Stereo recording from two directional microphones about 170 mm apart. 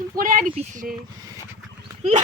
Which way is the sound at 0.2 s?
50° right (ahead or behind).